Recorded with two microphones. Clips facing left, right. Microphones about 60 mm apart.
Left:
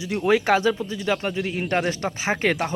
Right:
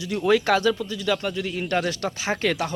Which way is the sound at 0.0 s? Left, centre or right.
Left.